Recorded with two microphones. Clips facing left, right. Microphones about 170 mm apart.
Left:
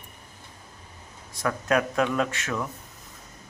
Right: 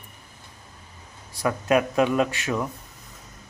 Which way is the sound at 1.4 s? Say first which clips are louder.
Right 3 dB; 15° right (ahead or behind).